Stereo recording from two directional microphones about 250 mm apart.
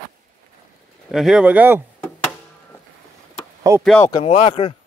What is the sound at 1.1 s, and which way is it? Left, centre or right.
Speech, centre.